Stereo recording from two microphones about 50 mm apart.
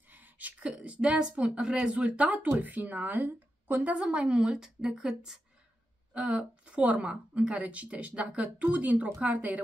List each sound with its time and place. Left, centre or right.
0.1 s a woman's voice: right
4.0 s a woman's voice: centre